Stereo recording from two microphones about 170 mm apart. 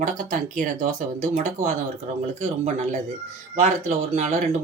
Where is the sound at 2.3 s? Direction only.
40° right (ahead or behind).